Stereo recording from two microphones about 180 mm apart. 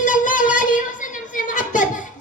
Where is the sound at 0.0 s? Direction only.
45° left (ahead or behind).